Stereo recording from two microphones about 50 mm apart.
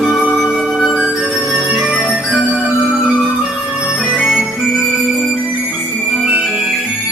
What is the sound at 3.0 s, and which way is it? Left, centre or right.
Music, centre.